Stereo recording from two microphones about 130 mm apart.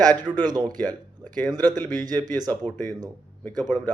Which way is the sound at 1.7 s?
15° left (ahead or behind).